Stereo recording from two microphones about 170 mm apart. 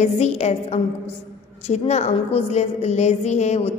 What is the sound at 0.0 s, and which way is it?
A woman's voice, 40° left (ahead or behind).